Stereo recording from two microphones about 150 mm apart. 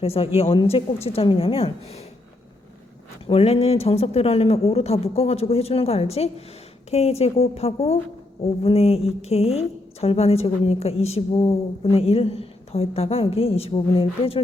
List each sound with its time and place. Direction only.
0.0 s a woman's voice: 40° left (ahead or behind)
3.2 s a woman's voice: 40° left (ahead or behind)